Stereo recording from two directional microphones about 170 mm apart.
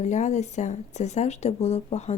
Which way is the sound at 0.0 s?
45° left (ahead or behind).